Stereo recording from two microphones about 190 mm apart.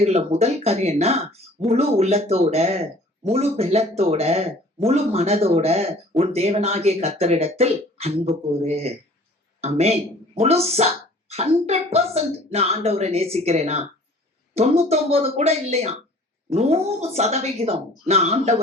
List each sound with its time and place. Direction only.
0.0 s speech: 35° right (ahead or behind)